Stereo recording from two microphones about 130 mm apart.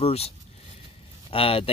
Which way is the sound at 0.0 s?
50° left (ahead or behind).